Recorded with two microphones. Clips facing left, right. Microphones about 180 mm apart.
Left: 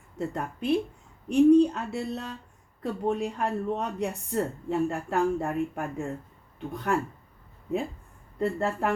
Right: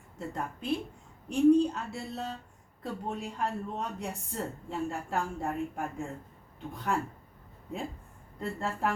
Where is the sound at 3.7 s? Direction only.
65° left (ahead or behind).